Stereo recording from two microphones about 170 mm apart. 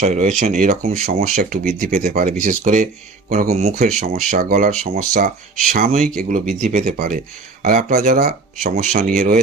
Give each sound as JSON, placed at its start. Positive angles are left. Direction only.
{"t": 0.0, "sound": "speech", "side_deg": -45}
{"t": 3.5, "sound": "speech", "side_deg": -45}
{"t": 4.3, "sound": "speech", "side_deg": -55}
{"t": 8.7, "sound": "speech", "side_deg": -45}
{"t": 9.1, "sound": "speech", "side_deg": -55}